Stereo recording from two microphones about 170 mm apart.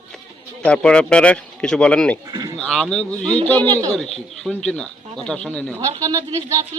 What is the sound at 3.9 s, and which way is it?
A man's voice, centre (ahead or behind).